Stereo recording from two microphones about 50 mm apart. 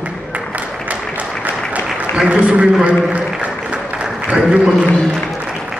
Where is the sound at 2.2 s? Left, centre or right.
Right.